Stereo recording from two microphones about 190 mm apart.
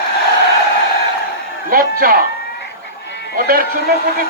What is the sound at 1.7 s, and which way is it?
Speech, 50° right (ahead or behind).